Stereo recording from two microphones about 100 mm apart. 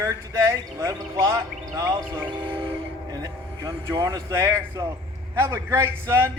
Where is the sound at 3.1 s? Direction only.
40° right (ahead or behind).